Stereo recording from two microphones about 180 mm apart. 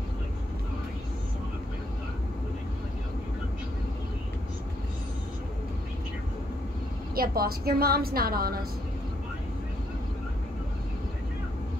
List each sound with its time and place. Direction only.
7.2 s a woman's voice: 55° right (ahead or behind)